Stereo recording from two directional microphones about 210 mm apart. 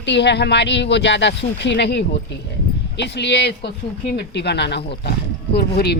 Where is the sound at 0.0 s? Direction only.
55° left (ahead or behind).